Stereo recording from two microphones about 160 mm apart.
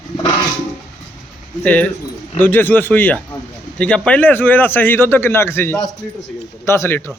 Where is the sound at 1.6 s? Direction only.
10° left (ahead or behind).